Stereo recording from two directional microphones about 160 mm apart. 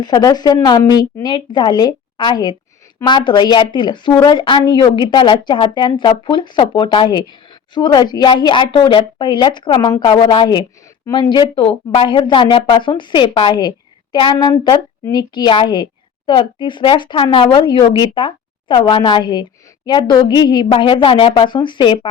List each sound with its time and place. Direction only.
0.0 s a woman's voice: 25° left (ahead or behind)